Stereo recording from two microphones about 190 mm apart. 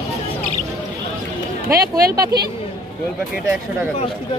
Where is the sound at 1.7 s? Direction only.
55° right (ahead or behind).